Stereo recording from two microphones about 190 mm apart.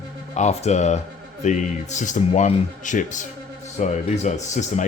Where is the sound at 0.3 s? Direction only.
35° left (ahead or behind).